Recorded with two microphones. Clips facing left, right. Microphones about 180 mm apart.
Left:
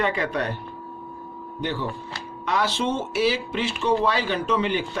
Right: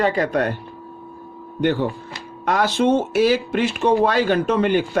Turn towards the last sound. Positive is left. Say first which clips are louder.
# right 6 dB
turn(degrees=-50)  # may be behind; listen again after turning